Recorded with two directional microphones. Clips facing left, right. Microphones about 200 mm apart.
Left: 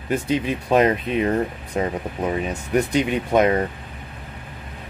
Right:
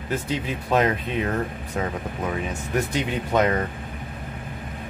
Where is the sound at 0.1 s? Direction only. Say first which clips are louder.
Left 5 dB; 15° left (ahead or behind).